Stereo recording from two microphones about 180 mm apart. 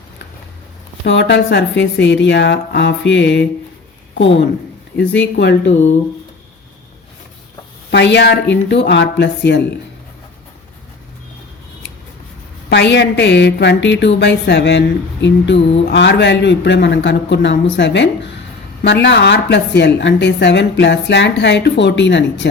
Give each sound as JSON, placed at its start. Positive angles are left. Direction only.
{"t": 1.0, "sound": "a woman's voice", "side_deg": 75}
{"t": 4.9, "sound": "speech", "side_deg": 80}
{"t": 7.9, "sound": "a woman's voice", "side_deg": 70}
{"t": 12.6, "sound": "a woman's voice", "side_deg": 75}